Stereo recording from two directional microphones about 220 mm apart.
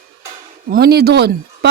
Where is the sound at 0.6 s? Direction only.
45° right (ahead or behind).